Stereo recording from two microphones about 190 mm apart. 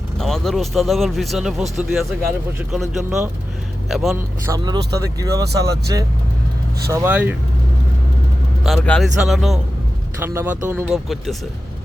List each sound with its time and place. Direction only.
0.2 s speech: centre (ahead or behind)
4.4 s speech: 20° right (ahead or behind)
8.6 s speech: 5° left (ahead or behind)
10.2 s speech: 10° right (ahead or behind)